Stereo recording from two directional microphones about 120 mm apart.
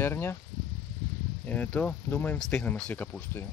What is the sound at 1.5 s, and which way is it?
Speech, 10° left (ahead or behind).